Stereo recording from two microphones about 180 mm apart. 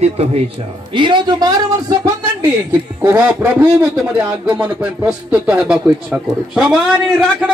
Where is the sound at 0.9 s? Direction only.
25° right (ahead or behind).